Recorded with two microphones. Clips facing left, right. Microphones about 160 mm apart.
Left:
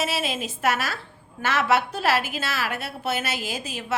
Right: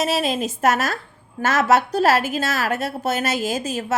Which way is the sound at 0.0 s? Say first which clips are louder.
Right 6 dB; 40° right (ahead or behind).